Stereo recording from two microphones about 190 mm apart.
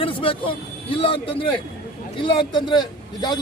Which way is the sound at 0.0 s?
30° left (ahead or behind).